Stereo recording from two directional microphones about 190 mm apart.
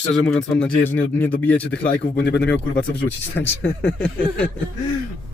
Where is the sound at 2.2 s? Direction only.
60° left (ahead or behind).